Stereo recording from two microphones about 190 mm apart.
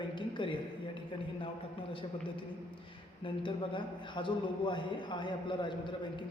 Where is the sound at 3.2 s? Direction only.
25° left (ahead or behind).